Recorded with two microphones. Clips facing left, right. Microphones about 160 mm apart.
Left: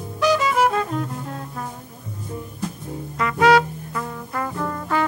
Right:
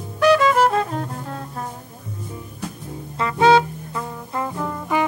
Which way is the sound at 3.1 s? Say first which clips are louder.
Right 1 dB; 25° right (ahead or behind).